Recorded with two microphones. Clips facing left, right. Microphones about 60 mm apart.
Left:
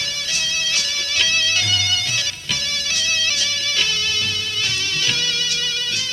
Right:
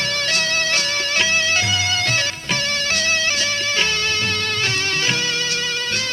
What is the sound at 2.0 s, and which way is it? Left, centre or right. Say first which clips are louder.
Music: right 4 dB; right.